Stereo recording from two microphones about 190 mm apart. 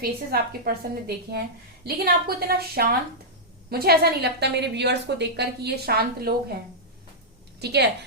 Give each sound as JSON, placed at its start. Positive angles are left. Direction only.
{"t": 0.0, "sound": "a woman's voice", "side_deg": -55}
{"t": 7.6, "sound": "a woman's voice", "side_deg": -60}